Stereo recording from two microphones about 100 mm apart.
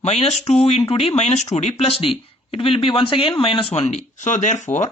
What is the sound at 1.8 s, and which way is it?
Speech, 70° left (ahead or behind).